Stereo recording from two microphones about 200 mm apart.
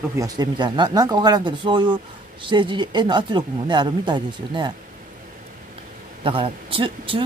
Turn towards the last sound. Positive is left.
turn(degrees=-25)  # may be behind; listen again after turning